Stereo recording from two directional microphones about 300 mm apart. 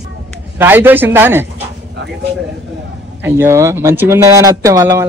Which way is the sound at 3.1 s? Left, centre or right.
Centre.